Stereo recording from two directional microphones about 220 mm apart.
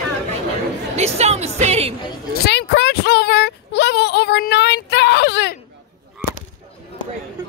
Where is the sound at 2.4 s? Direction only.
50° left (ahead or behind).